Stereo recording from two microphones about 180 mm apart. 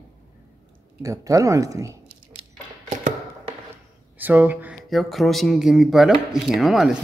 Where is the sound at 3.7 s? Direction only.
10° right (ahead or behind).